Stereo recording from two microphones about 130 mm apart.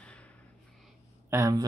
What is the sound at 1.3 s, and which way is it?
Speech, 25° right (ahead or behind).